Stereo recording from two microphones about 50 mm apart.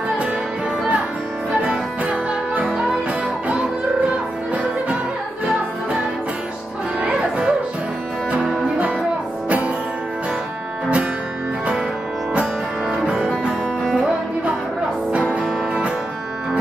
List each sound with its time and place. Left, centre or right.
1.6 s music: right
2.6 s music: centre
7.1 s music: centre
13.0 s music: right